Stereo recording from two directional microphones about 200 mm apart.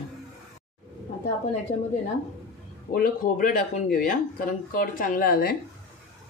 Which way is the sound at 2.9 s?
45° left (ahead or behind).